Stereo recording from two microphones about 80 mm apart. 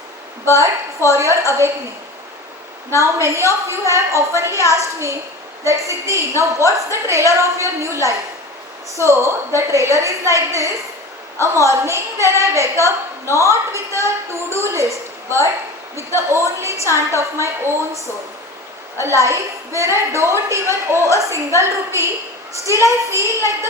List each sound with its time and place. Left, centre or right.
1.1 s a woman's voice: right
3.0 s a woman's voice: right